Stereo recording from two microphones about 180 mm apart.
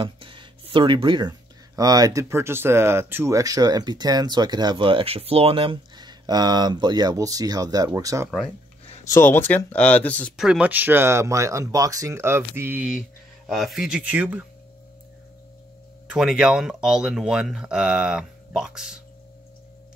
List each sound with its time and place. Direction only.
0.0 s music: 30° right (ahead or behind)
1.8 s speech: 20° right (ahead or behind)
9.1 s speech: 10° left (ahead or behind)
10.3 s speech: 5° right (ahead or behind)
16.1 s speech: centre (ahead or behind)